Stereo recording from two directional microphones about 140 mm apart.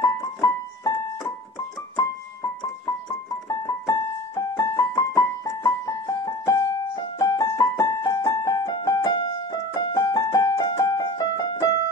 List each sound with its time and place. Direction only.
0.0 s music: 25° left (ahead or behind)
2.6 s keyboard: 25° left (ahead or behind)